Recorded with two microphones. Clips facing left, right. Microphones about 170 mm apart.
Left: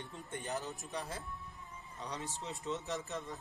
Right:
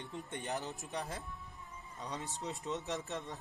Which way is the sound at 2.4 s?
20° right (ahead or behind).